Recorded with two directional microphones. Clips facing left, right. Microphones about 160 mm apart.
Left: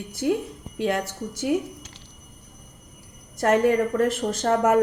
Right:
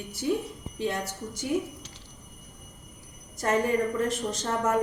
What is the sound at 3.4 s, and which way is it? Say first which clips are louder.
A woman's voice: left 6 dB; 70° left (ahead or behind).